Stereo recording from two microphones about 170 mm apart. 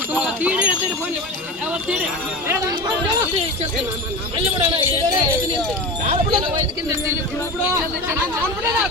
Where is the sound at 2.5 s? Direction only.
25° right (ahead or behind).